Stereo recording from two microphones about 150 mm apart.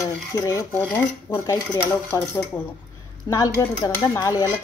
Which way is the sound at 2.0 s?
15° left (ahead or behind).